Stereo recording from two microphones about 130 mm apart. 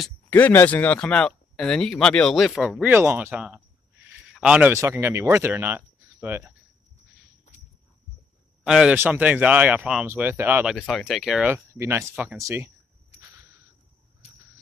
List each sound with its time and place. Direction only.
0.3 s speech: 15° left (ahead or behind); by 4.7 s 10° right (ahead or behind)
4.7 s speech: 20° right (ahead or behind)
7.5 s walk: 60° left (ahead or behind)
8.6 s speech: 5° right (ahead or behind)
10.6 s speech: 5° right (ahead or behind)
11.5 s speech: 20° right (ahead or behind)